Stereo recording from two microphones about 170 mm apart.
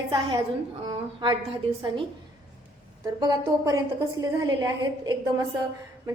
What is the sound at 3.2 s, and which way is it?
A woman's voice, 20° right (ahead or behind).